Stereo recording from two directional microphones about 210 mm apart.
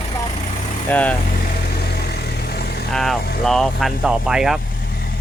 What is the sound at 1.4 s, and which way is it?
Vehicle, 50° left (ahead or behind).